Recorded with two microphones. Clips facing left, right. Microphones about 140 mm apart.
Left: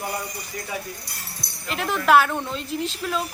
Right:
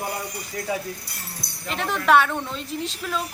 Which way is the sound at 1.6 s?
Centre (ahead or behind).